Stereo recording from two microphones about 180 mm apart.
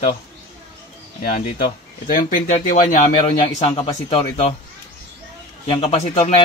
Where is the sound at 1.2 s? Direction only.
55° left (ahead or behind).